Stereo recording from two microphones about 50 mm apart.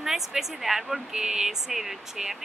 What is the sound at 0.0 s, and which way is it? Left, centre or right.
A woman's voice, centre.